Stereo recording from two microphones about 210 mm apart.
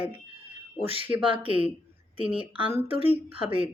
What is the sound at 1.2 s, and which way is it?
Speech, 25° right (ahead or behind).